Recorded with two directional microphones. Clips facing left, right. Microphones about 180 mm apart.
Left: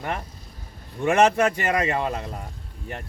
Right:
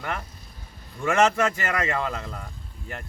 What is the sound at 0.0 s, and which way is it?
A man's voice, 20° left (ahead or behind).